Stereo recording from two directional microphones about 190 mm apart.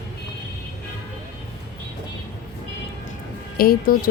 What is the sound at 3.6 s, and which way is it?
Speech, 50° left (ahead or behind).